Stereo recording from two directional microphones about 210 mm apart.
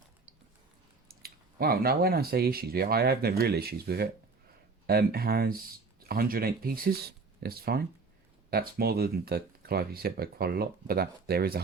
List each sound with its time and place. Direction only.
1.0 s speech: 45° right (ahead or behind)